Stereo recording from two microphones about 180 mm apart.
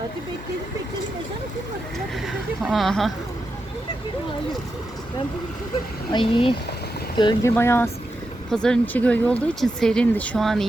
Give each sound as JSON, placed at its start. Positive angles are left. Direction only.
{"t": 2.2, "sound": "a sound", "side_deg": 0}
{"t": 6.1, "sound": "speech", "side_deg": 25}
{"t": 7.5, "sound": "speech", "side_deg": 15}